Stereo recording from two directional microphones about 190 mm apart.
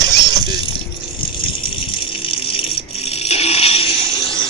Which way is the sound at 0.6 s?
30° left (ahead or behind).